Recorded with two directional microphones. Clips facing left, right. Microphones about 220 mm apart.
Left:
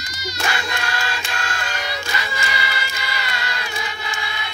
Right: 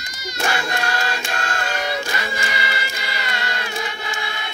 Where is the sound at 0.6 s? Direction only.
45° right (ahead or behind).